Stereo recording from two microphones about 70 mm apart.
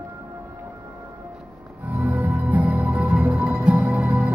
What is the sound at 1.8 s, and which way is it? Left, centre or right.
Music, right.